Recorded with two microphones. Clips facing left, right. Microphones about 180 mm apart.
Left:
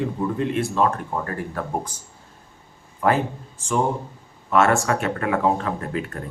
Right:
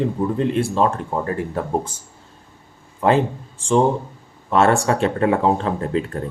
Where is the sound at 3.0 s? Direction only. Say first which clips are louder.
Right 4 dB; 30° right (ahead or behind).